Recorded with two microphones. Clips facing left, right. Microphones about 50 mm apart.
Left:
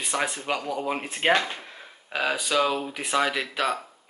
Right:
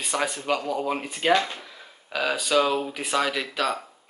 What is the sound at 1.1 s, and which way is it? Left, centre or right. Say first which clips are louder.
Speech: even; left.